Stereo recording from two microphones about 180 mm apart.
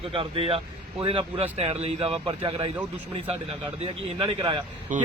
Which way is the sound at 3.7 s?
25° right (ahead or behind).